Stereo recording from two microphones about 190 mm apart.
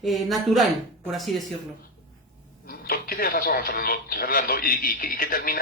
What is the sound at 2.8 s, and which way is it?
Speech, 50° left (ahead or behind).